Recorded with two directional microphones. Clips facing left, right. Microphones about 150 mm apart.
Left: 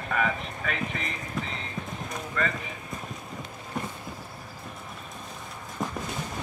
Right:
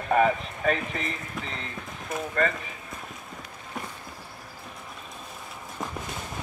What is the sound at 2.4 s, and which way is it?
Speech, 40° right (ahead or behind).